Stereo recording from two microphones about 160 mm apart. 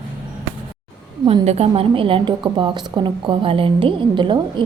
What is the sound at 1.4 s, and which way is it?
A woman's voice, 40° right (ahead or behind).